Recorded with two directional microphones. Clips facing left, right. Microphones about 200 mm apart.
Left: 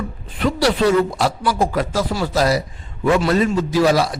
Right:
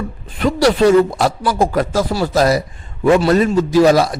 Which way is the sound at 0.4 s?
45° right (ahead or behind).